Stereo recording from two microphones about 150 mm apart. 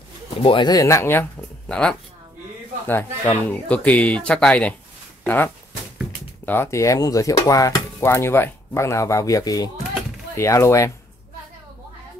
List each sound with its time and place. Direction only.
0.4 s speech: 30° left (ahead or behind); by 1.2 s 15° left (ahead or behind)
1.7 s speech: 5° left (ahead or behind)